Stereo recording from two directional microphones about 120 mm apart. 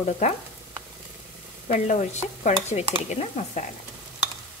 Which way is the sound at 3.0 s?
75° left (ahead or behind).